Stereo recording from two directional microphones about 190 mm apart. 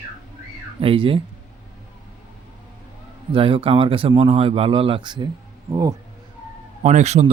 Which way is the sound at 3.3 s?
30° right (ahead or behind).